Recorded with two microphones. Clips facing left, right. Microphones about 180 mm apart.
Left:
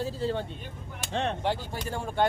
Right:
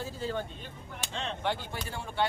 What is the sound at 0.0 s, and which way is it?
Speech, 30° left (ahead or behind).